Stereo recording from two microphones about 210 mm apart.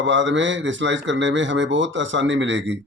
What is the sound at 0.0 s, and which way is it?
Speech, 60° right (ahead or behind).